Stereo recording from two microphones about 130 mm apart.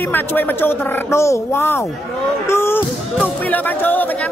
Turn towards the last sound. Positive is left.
turn(degrees=15)  # may be behind; listen again after turning